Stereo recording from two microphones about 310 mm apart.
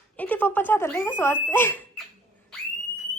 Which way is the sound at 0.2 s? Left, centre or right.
Centre.